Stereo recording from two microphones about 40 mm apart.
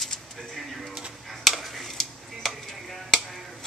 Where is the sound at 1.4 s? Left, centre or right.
Centre.